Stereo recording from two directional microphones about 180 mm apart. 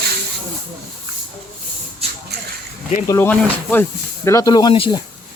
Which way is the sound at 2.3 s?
65° right (ahead or behind).